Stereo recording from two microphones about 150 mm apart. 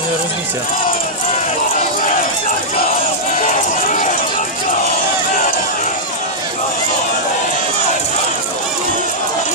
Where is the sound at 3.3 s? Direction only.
60° left (ahead or behind).